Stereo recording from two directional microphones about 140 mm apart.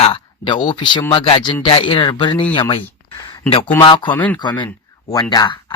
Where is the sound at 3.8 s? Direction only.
35° left (ahead or behind).